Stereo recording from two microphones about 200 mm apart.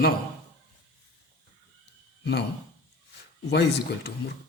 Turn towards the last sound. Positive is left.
turn(degrees=55)  # may be behind; listen again after turning